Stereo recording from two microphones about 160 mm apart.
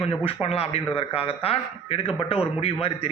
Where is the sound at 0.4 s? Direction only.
40° left (ahead or behind).